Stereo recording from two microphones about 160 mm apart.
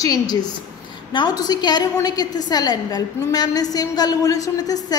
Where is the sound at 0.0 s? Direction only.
25° left (ahead or behind).